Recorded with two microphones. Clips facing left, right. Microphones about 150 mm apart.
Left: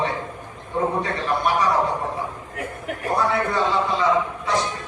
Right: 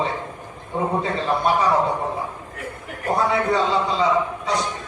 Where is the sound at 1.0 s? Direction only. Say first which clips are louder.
Right 2 dB; 25° right (ahead or behind).